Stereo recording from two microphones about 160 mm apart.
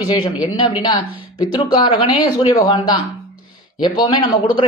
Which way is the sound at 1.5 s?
25° left (ahead or behind).